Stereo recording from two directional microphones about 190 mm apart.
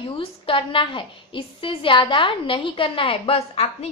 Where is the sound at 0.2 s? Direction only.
25° left (ahead or behind).